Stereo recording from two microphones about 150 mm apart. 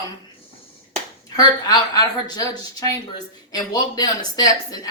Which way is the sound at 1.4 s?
25° left (ahead or behind).